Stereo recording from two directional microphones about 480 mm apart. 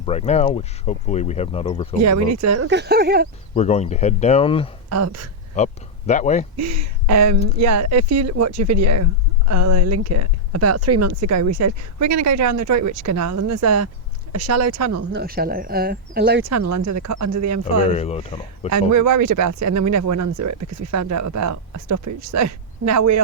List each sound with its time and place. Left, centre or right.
0.0 s speech: centre
2.0 s speech: right
3.5 s speech: centre
4.9 s speech: right
5.5 s speech: centre
6.6 s speech: right
15.1 s speech: centre
17.9 s speech: centre
18.7 s speech: right